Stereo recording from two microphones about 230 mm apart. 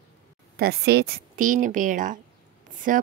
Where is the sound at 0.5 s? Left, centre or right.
Right.